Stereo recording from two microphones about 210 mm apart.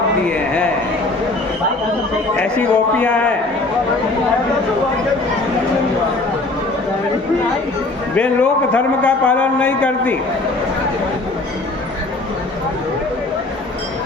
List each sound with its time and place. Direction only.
0.3 s speech: 5° left (ahead or behind)
2.4 s a man's voice: 5° left (ahead or behind)
8.1 s a man's voice: 5° left (ahead or behind)